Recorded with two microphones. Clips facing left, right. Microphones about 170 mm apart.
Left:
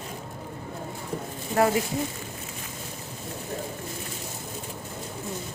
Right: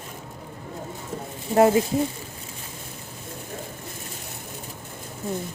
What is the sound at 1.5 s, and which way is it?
Speech, 25° right (ahead or behind).